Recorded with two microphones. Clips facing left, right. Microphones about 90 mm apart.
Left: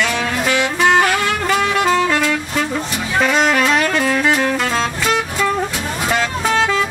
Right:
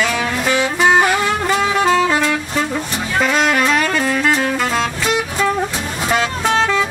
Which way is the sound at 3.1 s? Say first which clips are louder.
Left 1 dB; centre (ahead or behind).